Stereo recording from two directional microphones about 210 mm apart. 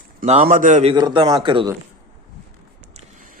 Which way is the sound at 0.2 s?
30° right (ahead or behind).